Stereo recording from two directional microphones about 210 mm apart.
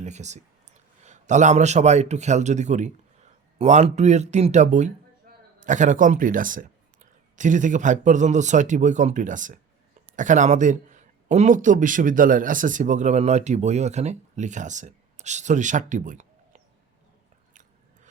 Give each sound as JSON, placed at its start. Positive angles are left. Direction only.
{"t": 0.0, "sound": "a man's voice", "side_deg": -35}